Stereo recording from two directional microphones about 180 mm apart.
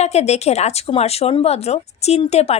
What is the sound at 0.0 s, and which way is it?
Speech, 35° left (ahead or behind).